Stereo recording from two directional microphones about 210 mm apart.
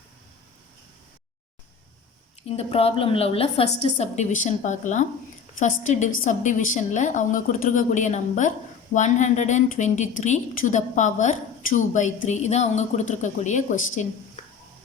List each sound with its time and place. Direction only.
2.5 s a woman's voice: 30° left (ahead or behind)